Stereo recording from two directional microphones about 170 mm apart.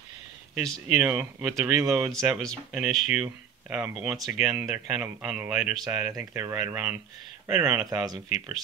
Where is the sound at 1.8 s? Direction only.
15° right (ahead or behind).